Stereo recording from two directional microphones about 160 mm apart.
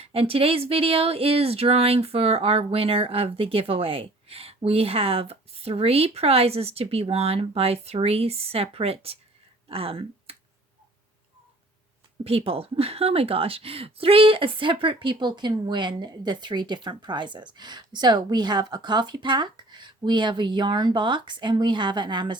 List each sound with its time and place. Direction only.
0.0 s speech: 35° right (ahead or behind)
12.2 s speech: 35° right (ahead or behind)